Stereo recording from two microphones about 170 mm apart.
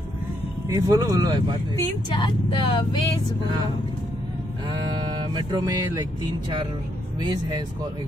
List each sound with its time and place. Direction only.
0.7 s speech: 20° right (ahead or behind)
1.8 s speech: 25° left (ahead or behind)
4.6 s speech: 25° right (ahead or behind)
7.2 s speech: 25° right (ahead or behind)